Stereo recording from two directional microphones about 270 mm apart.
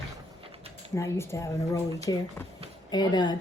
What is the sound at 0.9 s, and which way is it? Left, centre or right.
A woman's voice, centre.